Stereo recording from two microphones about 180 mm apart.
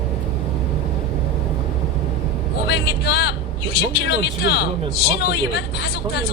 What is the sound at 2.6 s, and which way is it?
Speech, 70° left (ahead or behind).